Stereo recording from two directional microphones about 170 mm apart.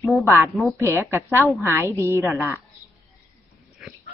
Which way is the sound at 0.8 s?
15° right (ahead or behind).